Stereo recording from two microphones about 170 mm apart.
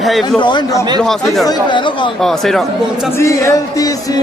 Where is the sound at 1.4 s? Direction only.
25° left (ahead or behind).